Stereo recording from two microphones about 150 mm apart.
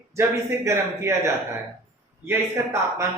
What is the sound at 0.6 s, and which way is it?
A woman's voice, 20° right (ahead or behind).